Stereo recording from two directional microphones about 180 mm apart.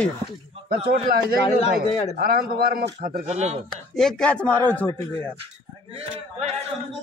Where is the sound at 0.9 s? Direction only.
50° right (ahead or behind).